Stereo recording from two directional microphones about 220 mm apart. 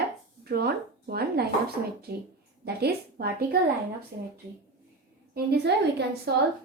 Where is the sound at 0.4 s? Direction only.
45° right (ahead or behind).